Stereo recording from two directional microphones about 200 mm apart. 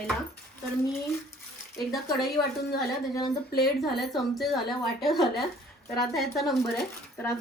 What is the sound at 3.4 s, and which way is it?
Speech, 50° left (ahead or behind).